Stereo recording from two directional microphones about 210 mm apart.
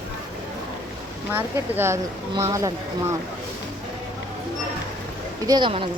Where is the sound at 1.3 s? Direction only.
10° right (ahead or behind).